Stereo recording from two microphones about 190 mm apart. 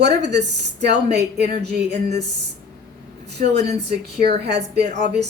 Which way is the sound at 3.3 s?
60° right (ahead or behind).